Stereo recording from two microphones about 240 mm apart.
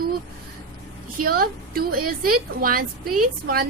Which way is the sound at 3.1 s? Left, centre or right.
Right.